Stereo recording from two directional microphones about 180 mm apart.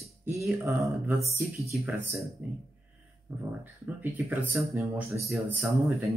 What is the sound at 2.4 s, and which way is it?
Speech, 10° right (ahead or behind).